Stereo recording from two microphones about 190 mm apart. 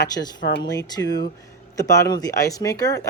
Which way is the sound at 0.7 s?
20° left (ahead or behind).